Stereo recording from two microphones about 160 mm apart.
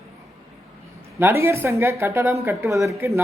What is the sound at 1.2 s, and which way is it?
A woman's voice, 15° right (ahead or behind).